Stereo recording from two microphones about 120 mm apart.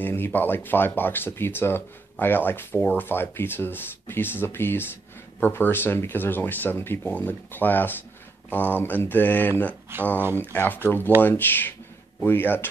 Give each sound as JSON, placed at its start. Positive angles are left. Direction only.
{"t": 0.0, "sound": "speech", "side_deg": 15}